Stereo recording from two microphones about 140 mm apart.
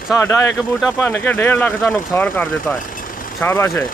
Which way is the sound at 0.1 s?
15° left (ahead or behind).